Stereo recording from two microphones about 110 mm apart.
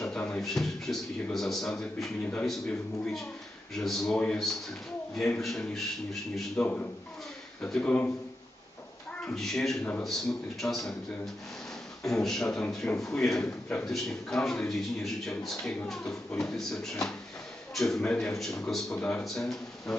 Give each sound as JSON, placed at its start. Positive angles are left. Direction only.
{"t": 0.0, "sound": "a man's voice", "side_deg": 10}
{"t": 9.2, "sound": "a man's voice", "side_deg": 5}
{"t": 12.0, "sound": "a man's voice", "side_deg": 5}